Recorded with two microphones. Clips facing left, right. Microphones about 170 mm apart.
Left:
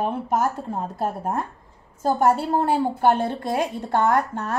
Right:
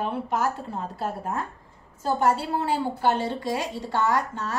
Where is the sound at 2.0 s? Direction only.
50° left (ahead or behind).